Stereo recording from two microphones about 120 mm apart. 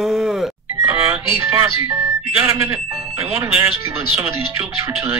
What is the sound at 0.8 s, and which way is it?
Music, 15° right (ahead or behind).